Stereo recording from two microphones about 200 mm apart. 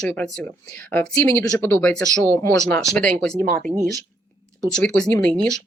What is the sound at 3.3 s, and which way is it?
Speech, 45° right (ahead or behind).